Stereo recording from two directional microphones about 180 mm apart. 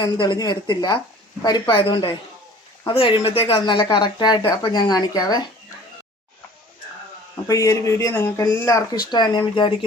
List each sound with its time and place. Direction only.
0.0 s speech: 25° left (ahead or behind)
7.4 s speech: 20° left (ahead or behind)